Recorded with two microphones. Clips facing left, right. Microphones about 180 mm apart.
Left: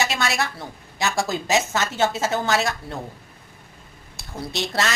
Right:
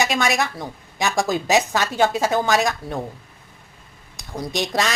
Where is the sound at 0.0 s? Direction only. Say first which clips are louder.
Right 3 dB; 15° right (ahead or behind).